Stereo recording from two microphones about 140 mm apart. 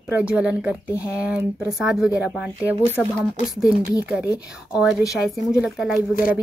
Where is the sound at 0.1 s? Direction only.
5° right (ahead or behind).